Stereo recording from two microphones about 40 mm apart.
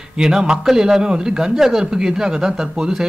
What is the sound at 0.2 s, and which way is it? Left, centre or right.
Speech, centre.